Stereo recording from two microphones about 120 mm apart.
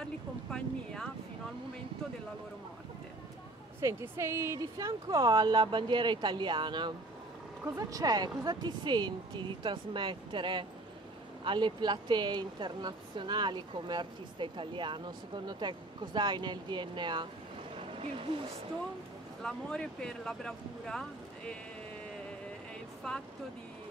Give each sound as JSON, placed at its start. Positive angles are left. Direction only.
{"t": 0.0, "sound": "a sound", "side_deg": 5}
{"t": 3.8, "sound": "speech", "side_deg": -20}
{"t": 5.1, "sound": "speech", "side_deg": -40}
{"t": 7.6, "sound": "speech", "side_deg": -30}
{"t": 17.7, "sound": "vehicle", "side_deg": -50}
{"t": 19.4, "sound": "speech", "side_deg": 5}
{"t": 23.0, "sound": "speech", "side_deg": 5}